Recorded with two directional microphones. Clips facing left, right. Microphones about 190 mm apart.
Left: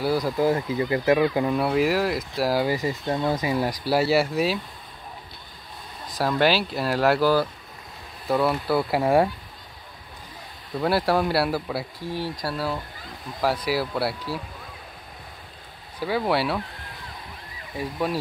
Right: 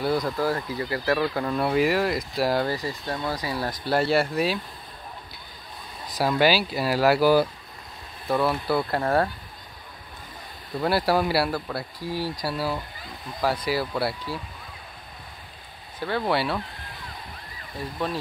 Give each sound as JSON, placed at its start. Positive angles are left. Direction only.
{"t": 0.0, "sound": "speech", "side_deg": 5}
{"t": 0.4, "sound": "speech", "side_deg": 20}
{"t": 1.6, "sound": "speech", "side_deg": 0}
{"t": 2.7, "sound": "speech", "side_deg": 20}
{"t": 6.1, "sound": "speech", "side_deg": 0}
{"t": 8.3, "sound": "speech", "side_deg": 0}
{"t": 10.8, "sound": "speech", "side_deg": 0}
{"t": 12.0, "sound": "speech", "side_deg": -5}
{"t": 16.0, "sound": "speech", "side_deg": 5}
{"t": 17.7, "sound": "speech", "side_deg": 10}